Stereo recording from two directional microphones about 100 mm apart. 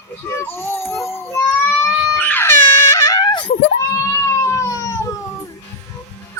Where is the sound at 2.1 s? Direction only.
20° left (ahead or behind); by 3.5 s 50° left (ahead or behind).